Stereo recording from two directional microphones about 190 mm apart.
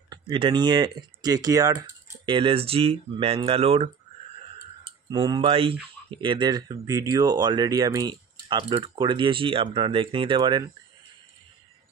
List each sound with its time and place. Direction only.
0.1 s speech: 25° right (ahead or behind)